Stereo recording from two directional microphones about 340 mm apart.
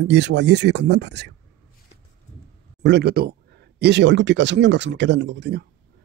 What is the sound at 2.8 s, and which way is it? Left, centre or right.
Speech, right.